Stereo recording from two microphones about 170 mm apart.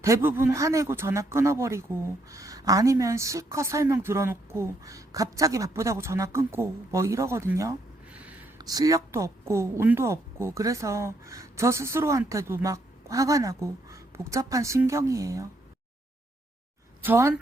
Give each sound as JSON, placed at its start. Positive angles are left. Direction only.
{"t": 0.0, "sound": "speech", "side_deg": -15}
{"t": 8.5, "sound": "speech", "side_deg": -20}
{"t": 17.0, "sound": "speech", "side_deg": -15}